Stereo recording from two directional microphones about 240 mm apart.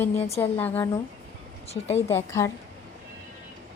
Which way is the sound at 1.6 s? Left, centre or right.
Left.